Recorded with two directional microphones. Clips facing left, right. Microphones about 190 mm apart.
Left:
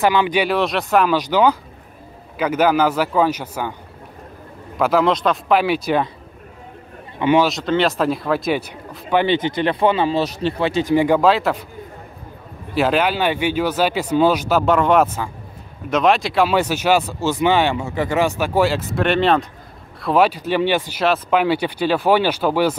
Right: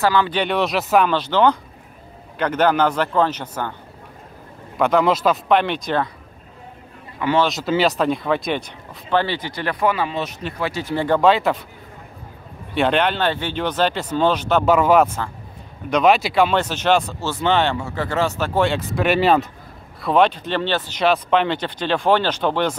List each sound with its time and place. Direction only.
0.0 s speech: 15° left (ahead or behind); by 1.1 s centre (ahead or behind)
1.1 s speech: 10° left (ahead or behind)
4.7 s speech: centre (ahead or behind)
7.2 s a man's voice: 20° left (ahead or behind)
7.4 s speech: 5° right (ahead or behind); by 11.1 s 15° left (ahead or behind)
11.1 s speech: centre (ahead or behind)
12.7 s speech: 5° left (ahead or behind)
14.6 s speech: 5° right (ahead or behind)